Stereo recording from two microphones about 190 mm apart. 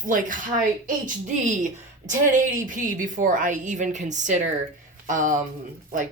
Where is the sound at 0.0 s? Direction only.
45° right (ahead or behind).